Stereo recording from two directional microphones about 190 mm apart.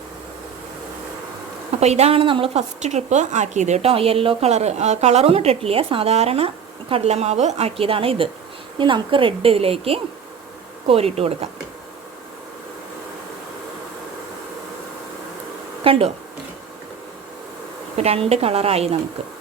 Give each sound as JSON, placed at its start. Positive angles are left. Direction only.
{"t": 1.8, "sound": "a woman's voice", "side_deg": -35}
{"t": 15.8, "sound": "speech", "side_deg": -30}
{"t": 17.9, "sound": "a woman's voice", "side_deg": -35}